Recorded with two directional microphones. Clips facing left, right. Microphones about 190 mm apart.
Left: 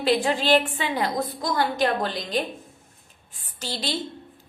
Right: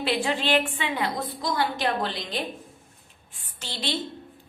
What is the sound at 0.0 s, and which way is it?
A woman's voice, 40° left (ahead or behind).